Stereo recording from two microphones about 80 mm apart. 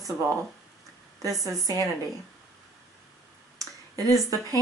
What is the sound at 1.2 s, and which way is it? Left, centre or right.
Speech, right.